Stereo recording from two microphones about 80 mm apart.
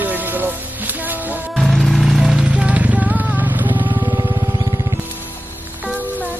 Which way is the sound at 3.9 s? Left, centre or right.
Right.